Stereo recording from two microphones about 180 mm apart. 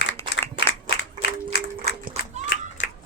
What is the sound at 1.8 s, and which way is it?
Children playing, 40° right (ahead or behind).